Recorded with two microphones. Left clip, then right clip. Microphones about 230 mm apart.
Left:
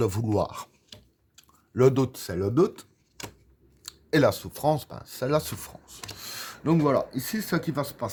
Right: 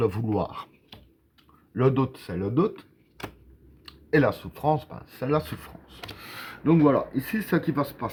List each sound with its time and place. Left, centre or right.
0.0 s speech: left
4.1 s speech: left